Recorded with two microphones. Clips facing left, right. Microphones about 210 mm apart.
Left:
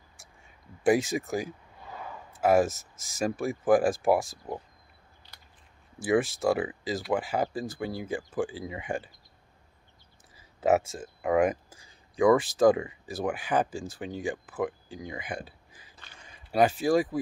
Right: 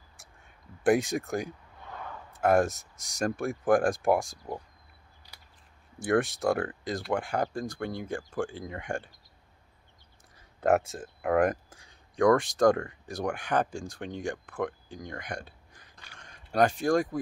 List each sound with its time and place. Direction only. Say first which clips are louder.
0.2 s speech: even; centre (ahead or behind)
5.9 s speech: left 1 dB; centre (ahead or behind)
10.3 s speech: left 1 dB; 5° left (ahead or behind)